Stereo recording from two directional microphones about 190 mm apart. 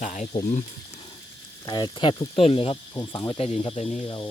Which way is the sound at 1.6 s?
20° left (ahead or behind).